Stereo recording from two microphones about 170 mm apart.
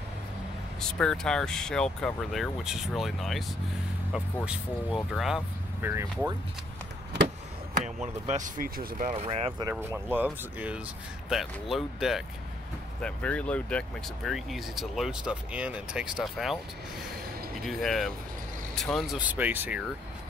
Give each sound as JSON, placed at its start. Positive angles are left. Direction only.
{"t": 0.7, "sound": "speech", "side_deg": 5}
{"t": 4.5, "sound": "speech", "side_deg": 0}
{"t": 5.8, "sound": "speech", "side_deg": -15}
{"t": 8.3, "sound": "speech", "side_deg": -50}
{"t": 9.7, "sound": "speech", "side_deg": -10}
{"t": 17.6, "sound": "speech", "side_deg": 0}